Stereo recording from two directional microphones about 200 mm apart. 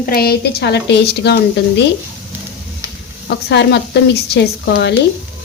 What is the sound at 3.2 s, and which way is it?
Speech, 60° left (ahead or behind).